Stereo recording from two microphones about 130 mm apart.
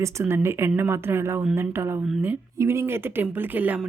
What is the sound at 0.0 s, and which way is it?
Speech, 20° right (ahead or behind).